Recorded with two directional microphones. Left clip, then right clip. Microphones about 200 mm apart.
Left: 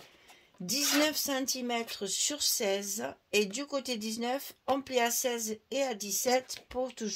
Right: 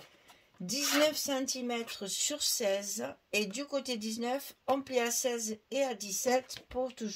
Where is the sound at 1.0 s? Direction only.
40° left (ahead or behind).